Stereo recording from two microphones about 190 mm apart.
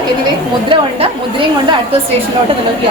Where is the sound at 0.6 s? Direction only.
25° right (ahead or behind).